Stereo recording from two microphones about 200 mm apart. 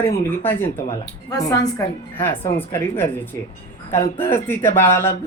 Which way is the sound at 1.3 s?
15° left (ahead or behind).